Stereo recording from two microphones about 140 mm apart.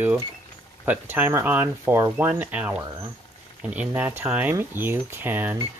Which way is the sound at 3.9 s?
15° right (ahead or behind).